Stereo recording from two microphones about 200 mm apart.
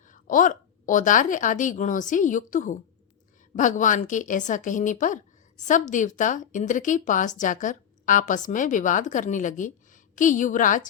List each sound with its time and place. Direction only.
0.1 s a woman's voice: 40° left (ahead or behind)